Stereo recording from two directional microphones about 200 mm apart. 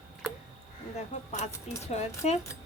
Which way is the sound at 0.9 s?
35° left (ahead or behind).